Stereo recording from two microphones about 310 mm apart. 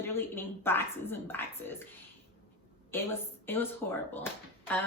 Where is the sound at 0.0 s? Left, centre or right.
Centre.